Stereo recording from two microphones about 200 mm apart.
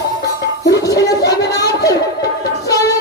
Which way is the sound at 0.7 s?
15° left (ahead or behind).